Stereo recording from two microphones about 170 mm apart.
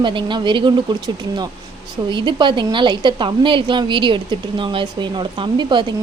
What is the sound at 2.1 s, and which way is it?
A woman's voice, 25° right (ahead or behind).